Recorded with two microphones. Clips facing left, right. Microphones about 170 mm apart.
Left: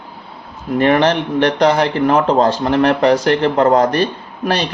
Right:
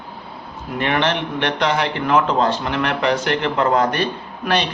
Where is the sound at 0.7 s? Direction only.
40° left (ahead or behind).